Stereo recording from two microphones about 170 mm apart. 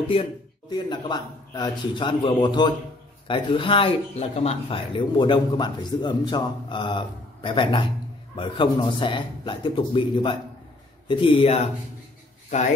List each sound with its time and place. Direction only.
0.1 s speech: 30° left (ahead or behind)